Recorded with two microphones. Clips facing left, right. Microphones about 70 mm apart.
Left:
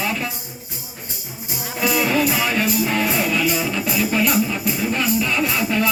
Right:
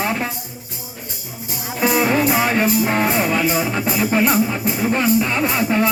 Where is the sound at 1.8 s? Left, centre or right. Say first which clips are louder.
Right 2 dB; right.